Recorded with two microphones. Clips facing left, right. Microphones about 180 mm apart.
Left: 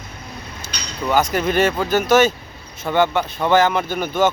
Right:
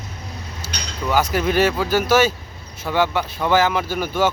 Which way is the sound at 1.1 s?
5° right (ahead or behind).